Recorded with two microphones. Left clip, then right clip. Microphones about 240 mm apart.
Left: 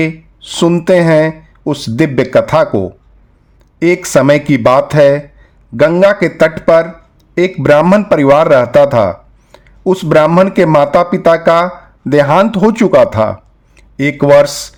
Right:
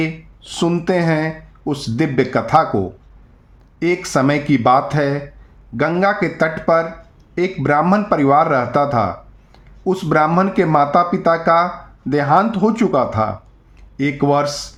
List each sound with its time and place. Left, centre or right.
0.0 s a man's voice: left